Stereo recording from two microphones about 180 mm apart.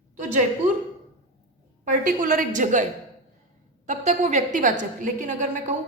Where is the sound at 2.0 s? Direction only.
45° right (ahead or behind).